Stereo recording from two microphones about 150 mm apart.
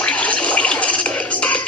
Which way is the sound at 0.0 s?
10° left (ahead or behind).